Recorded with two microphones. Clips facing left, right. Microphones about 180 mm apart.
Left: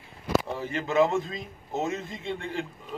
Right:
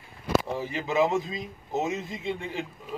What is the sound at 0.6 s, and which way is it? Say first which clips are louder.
A man's voice: left 1 dB; 5° right (ahead or behind).